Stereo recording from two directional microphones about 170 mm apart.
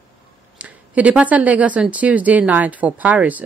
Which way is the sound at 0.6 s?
10° right (ahead or behind).